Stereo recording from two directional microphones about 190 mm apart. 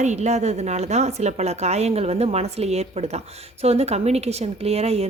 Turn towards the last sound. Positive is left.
turn(degrees=-35)  # may be behind; listen again after turning